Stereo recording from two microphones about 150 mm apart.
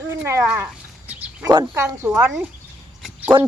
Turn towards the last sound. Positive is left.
turn(degrees=-30)  # may be behind; listen again after turning